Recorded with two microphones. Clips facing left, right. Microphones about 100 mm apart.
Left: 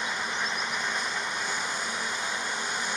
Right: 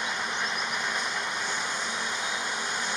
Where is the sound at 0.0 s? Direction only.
Centre (ahead or behind).